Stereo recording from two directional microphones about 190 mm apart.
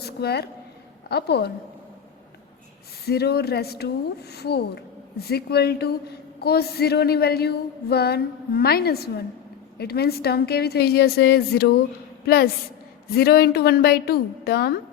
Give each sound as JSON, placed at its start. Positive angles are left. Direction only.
{"t": 0.0, "sound": "a sound", "side_deg": 60}
{"t": 1.0, "sound": "a woman's voice", "side_deg": 60}
{"t": 3.1, "sound": "a woman's voice", "side_deg": 55}